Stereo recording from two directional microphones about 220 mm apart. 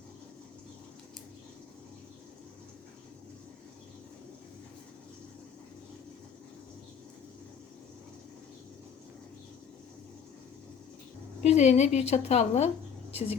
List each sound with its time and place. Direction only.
11.4 s speech: 30° left (ahead or behind)